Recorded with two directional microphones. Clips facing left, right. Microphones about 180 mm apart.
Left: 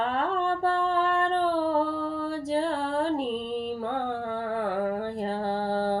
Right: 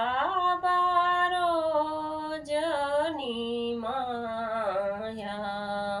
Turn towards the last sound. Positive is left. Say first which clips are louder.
# left 6 dB
turn(degrees=45)  # may be behind; listen again after turning